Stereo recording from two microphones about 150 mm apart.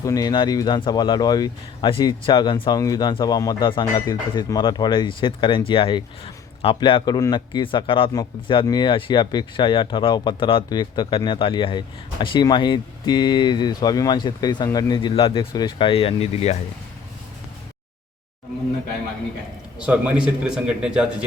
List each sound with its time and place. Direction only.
0.0 s speech: 25° left (ahead or behind)
8.1 s speech: 25° left (ahead or behind); by 16.6 s 45° left (ahead or behind)
19.8 s speech: 5° right (ahead or behind)